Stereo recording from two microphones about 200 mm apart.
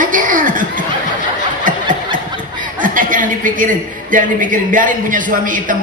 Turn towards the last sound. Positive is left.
turn(degrees=-40)  # may be behind; listen again after turning